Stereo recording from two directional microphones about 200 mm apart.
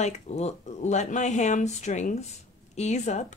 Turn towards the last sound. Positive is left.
turn(degrees=35)  # may be behind; listen again after turning